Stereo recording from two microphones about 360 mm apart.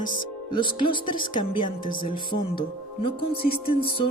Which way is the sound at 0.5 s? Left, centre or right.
Centre.